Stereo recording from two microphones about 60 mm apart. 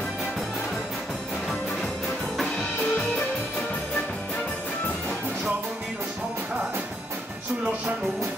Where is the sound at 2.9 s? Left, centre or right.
Left.